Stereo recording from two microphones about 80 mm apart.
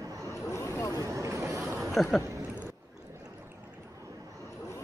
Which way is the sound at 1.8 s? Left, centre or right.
Centre.